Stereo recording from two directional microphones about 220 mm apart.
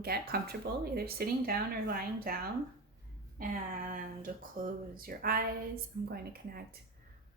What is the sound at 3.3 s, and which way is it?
Speech, 40° right (ahead or behind).